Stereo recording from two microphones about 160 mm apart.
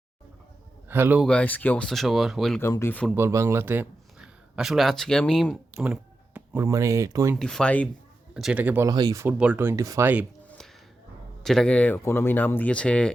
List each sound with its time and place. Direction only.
0.9 s speech: 15° right (ahead or behind)
1.2 s speech: 5° left (ahead or behind)
2.6 s speech: 15° left (ahead or behind)
3.2 s speech: 15° right (ahead or behind); by 5.5 s 5° left (ahead or behind)
5.7 s speech: 10° right (ahead or behind)
7.3 s speech: 5° left (ahead or behind)
8.3 s a man's voice: 5° right (ahead or behind)
8.9 s speech: 25° right (ahead or behind)
9.2 s speech: 10° right (ahead or behind)
11.4 s speech: 5° left (ahead or behind)